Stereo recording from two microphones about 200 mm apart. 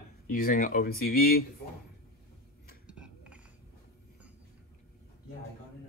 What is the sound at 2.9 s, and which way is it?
Cutlery, 5° right (ahead or behind).